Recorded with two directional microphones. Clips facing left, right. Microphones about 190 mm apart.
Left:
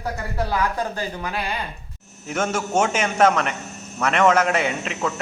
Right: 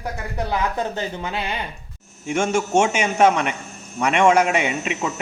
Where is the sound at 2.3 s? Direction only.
10° right (ahead or behind).